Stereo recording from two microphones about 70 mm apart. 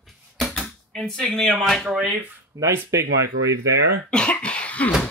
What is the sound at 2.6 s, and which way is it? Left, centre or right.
Speech, right.